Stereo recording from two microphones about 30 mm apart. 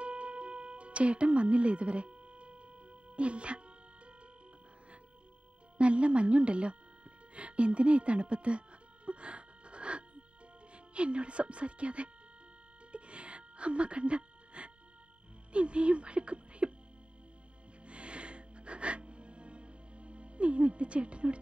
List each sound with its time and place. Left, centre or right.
0.0 s music: right
5.8 s speech: right
7.3 s music: right
10.7 s speech: right
12.9 s music: right
15.5 s speech: right
17.8 s music: right